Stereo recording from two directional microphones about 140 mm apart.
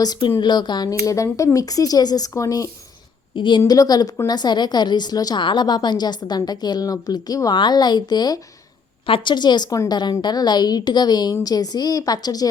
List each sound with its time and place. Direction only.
0.0 s a woman's voice: 30° left (ahead or behind)
3.3 s a woman's voice: 35° left (ahead or behind)